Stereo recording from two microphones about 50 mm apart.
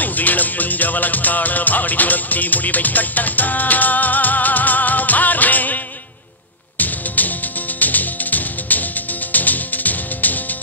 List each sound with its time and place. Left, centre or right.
0.0 s music: left
6.8 s music: left